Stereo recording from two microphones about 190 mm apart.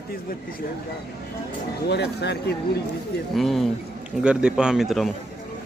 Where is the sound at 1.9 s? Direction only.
60° left (ahead or behind).